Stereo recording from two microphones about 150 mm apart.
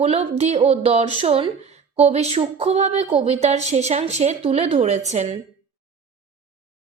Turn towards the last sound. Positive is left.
turn(degrees=-50)  # may be behind; listen again after turning